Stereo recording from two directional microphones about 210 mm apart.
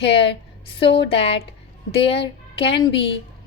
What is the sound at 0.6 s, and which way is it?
A woman's voice, 25° left (ahead or behind).